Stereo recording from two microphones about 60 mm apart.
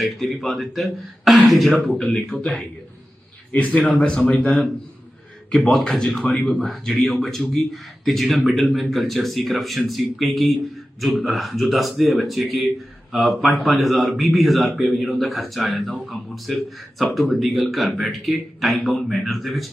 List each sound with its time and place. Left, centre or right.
0.0 s a man's voice: centre
2.4 s a man's voice: centre
4.3 s a man's voice: centre
5.7 s a man's voice: centre